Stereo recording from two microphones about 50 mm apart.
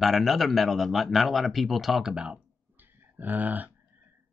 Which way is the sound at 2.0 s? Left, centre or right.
Centre.